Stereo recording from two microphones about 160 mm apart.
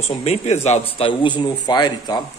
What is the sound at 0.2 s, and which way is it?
A man's voice, 45° left (ahead or behind).